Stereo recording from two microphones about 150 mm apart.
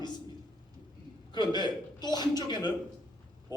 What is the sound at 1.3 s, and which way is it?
A man's voice, 30° left (ahead or behind).